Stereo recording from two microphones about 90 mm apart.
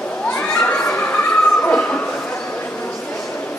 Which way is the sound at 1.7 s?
15° left (ahead or behind).